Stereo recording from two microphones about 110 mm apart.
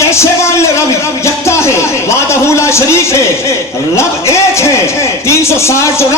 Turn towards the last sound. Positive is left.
turn(degrees=25)  # may be behind; listen again after turning